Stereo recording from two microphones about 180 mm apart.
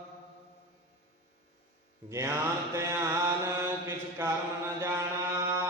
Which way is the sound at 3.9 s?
15° right (ahead or behind).